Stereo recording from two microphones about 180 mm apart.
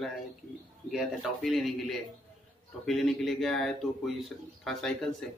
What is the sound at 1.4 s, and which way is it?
Speech, centre (ahead or behind).